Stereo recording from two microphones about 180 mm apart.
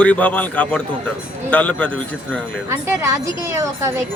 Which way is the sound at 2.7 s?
15° right (ahead or behind).